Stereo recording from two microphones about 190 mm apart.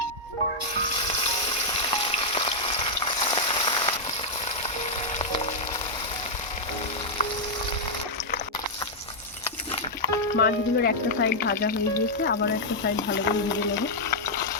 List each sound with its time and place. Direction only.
1.8 s frying: 30° left (ahead or behind)
10.3 s frying: 60° left (ahead or behind)
13.8 s stir: 55° left (ahead or behind)